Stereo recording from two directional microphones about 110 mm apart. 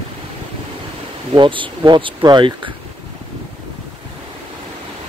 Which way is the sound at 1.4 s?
50° right (ahead or behind).